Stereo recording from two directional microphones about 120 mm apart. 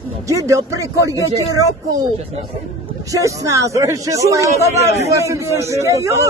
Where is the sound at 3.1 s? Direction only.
25° right (ahead or behind).